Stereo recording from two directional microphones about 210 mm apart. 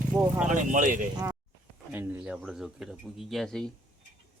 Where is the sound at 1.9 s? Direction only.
5° right (ahead or behind).